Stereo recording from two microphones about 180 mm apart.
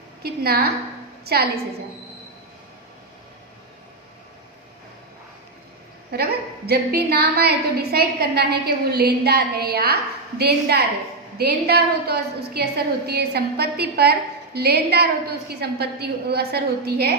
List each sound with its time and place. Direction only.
0.2 s a woman's voice: 60° right (ahead or behind)
6.1 s a woman's voice: 60° right (ahead or behind)